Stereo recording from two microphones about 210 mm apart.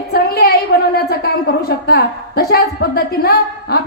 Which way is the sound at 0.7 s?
50° left (ahead or behind).